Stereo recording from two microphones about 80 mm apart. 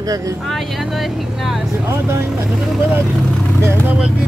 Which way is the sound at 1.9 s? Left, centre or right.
Right.